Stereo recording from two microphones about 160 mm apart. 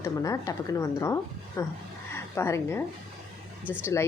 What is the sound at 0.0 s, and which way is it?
A woman's voice, 20° left (ahead or behind).